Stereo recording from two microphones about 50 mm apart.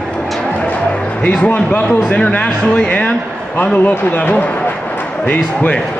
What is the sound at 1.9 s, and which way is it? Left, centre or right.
A man's voice, left.